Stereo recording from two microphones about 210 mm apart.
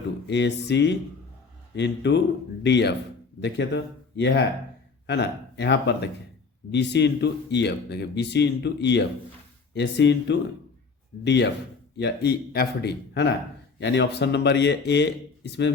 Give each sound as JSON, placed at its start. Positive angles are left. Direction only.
{"t": 0.3, "sound": "a man's voice", "side_deg": 55}